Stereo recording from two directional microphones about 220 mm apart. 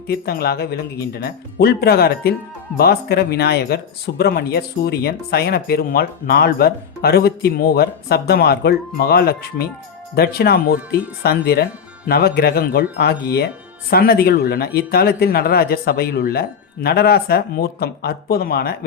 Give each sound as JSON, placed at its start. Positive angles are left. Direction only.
{"t": 0.1, "sound": "speech", "side_deg": 45}